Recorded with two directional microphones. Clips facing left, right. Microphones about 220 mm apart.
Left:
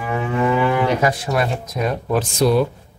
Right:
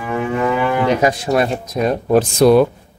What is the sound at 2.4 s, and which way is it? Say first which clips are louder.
Speech: right 6 dB; 60° right (ahead or behind).